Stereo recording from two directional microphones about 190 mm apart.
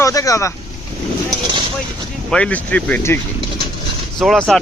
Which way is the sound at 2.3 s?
5° left (ahead or behind).